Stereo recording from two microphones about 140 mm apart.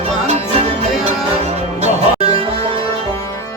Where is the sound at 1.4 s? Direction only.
45° right (ahead or behind).